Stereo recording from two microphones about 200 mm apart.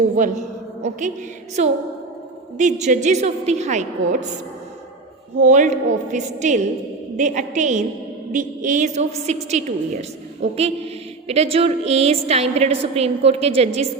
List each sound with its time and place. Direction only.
0.2 s a woman's voice: 35° right (ahead or behind)
5.4 s a woman's voice: 35° right (ahead or behind)